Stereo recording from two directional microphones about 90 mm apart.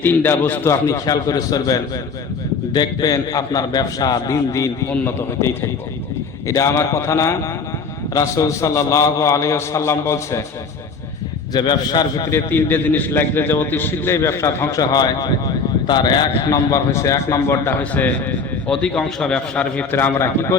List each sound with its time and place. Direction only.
0.0 s a man's voice: 25° left (ahead or behind)
0.7 s a man's voice: 35° left (ahead or behind)
6.5 s a man's voice: 35° left (ahead or behind)
11.5 s a man's voice: 55° left (ahead or behind)
12.3 s a man's voice: 25° left (ahead or behind)
18.0 s a man's voice: 20° left (ahead or behind)
18.7 s a man's voice: 10° left (ahead or behind)
19.9 s a man's voice: 25° left (ahead or behind)